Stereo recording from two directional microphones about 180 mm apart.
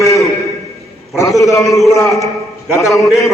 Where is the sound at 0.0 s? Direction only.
15° left (ahead or behind).